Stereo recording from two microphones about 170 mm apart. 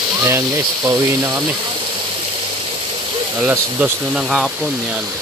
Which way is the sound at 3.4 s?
10° right (ahead or behind).